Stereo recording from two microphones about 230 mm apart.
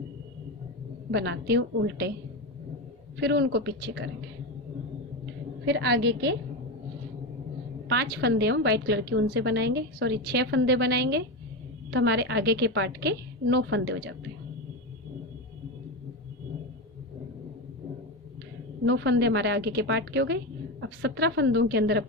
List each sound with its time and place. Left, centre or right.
1.1 s a woman's voice: right
3.2 s a woman's voice: right
5.6 s a woman's voice: right
7.9 s a woman's voice: right
18.9 s a woman's voice: right